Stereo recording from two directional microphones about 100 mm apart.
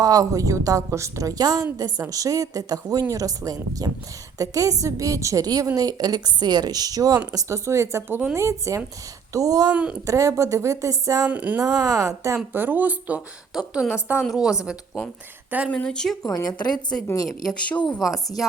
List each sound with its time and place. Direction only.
0.0 s a woman's voice: 35° right (ahead or behind)
11.3 s a woman's voice: 15° right (ahead or behind)
11.6 s a woman's voice: 35° right (ahead or behind)
12.5 s a woman's voice: 20° right (ahead or behind)
15.4 s a woman's voice: 15° right (ahead or behind)
15.7 s speech: 10° left (ahead or behind)
16.2 s a woman's voice: 40° left (ahead or behind)
17.2 s speech: centre (ahead or behind)
17.7 s speech: 10° left (ahead or behind)